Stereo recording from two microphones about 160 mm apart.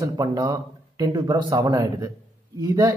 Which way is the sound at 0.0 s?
25° right (ahead or behind).